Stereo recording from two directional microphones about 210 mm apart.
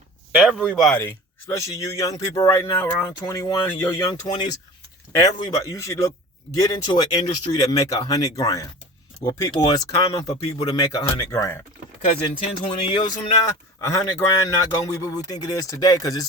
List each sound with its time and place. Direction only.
0.6 s speech: 5° right (ahead or behind)
0.9 s speech: 10° left (ahead or behind)
12.8 s speech: 25° left (ahead or behind)